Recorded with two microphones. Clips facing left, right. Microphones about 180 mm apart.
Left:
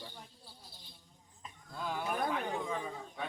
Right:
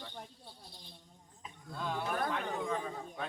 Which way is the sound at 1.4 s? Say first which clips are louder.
Right 1 dB; 5° left (ahead or behind).